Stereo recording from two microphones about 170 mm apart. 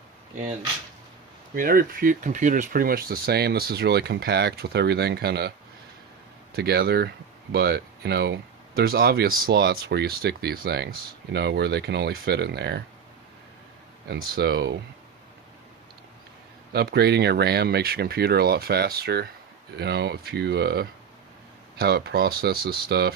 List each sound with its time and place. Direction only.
1.5 s speech: 55° right (ahead or behind); by 5.5 s 75° right (ahead or behind)
6.6 s speech: 70° right (ahead or behind)
11.3 s speech: 80° right
14.1 s speech: 70° right (ahead or behind)
16.7 s speech: 75° right (ahead or behind)
19.7 s speech: 75° right (ahead or behind)